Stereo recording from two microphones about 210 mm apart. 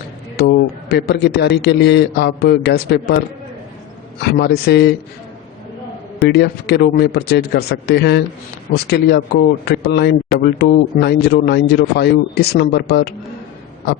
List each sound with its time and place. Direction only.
0.3 s a man's voice: 50° left (ahead or behind)
4.2 s a man's voice: 50° left (ahead or behind)
6.2 s a man's voice: 50° left (ahead or behind)